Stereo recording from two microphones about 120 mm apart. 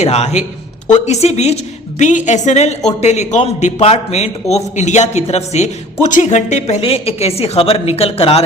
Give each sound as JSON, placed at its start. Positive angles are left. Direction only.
{"t": 0.0, "sound": "a woman's voice", "side_deg": 70}
{"t": 2.0, "sound": "a woman's voice", "side_deg": 90}
{"t": 6.8, "sound": "a woman's voice", "side_deg": 55}